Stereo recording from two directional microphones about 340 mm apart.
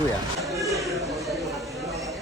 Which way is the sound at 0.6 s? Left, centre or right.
Centre.